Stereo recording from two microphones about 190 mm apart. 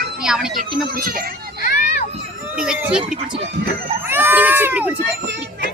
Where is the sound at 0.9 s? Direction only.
50° right (ahead or behind).